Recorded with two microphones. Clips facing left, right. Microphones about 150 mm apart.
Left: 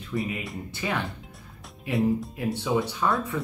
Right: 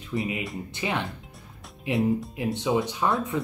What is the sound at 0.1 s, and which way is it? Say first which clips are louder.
Speech: right 1 dB; 20° right (ahead or behind).